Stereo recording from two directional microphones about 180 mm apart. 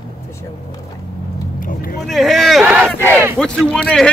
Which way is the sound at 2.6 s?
10° right (ahead or behind).